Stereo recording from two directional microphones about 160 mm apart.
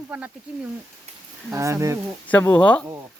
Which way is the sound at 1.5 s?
20° right (ahead or behind).